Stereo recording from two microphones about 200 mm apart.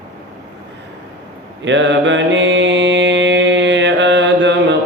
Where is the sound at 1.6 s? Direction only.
65° right (ahead or behind).